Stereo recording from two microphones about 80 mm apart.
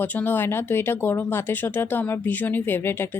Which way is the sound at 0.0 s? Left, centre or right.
Left.